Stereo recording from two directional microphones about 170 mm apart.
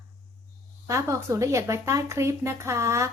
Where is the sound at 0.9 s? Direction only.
15° right (ahead or behind).